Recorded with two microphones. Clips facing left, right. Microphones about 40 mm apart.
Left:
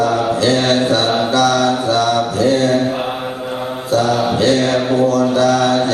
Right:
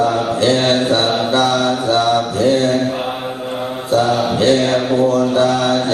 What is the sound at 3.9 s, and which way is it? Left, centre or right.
Mantra, right.